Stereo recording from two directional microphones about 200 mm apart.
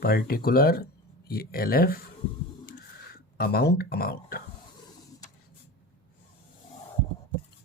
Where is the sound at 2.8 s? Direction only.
50° left (ahead or behind).